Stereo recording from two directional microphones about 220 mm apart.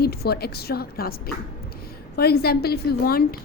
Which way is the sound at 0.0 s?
45° left (ahead or behind).